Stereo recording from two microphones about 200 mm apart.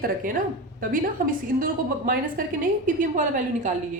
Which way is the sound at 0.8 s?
45° right (ahead or behind).